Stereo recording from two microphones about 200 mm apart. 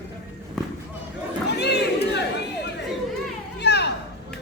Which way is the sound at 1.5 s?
55° left (ahead or behind).